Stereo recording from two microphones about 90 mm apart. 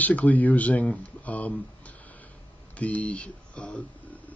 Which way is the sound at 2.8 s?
15° left (ahead or behind).